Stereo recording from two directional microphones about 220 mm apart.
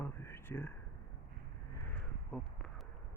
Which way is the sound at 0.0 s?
10° left (ahead or behind).